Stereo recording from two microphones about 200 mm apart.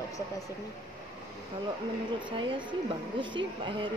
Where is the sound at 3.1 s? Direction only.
25° right (ahead or behind).